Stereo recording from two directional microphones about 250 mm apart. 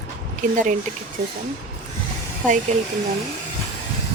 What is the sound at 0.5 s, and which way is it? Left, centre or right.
Speech, right.